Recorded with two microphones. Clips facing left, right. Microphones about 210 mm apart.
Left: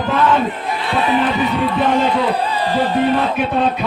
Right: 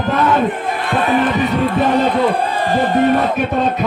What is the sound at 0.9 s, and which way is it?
Speech, 50° right (ahead or behind).